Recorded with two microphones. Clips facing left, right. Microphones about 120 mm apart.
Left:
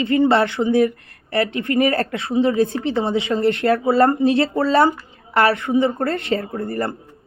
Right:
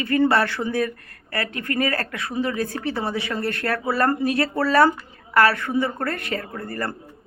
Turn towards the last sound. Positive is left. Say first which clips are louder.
# left 5 dB
turn(degrees=25)  # may be behind; listen again after turning